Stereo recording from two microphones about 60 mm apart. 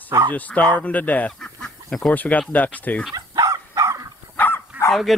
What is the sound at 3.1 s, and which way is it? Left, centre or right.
Dog, right.